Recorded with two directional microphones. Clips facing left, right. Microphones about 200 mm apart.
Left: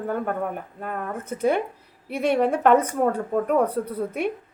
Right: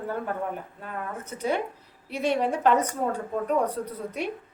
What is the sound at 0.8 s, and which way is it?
A woman's voice, 55° left (ahead or behind).